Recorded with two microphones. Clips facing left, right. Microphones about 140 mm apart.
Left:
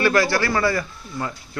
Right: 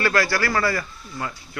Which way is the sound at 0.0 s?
20° left (ahead or behind).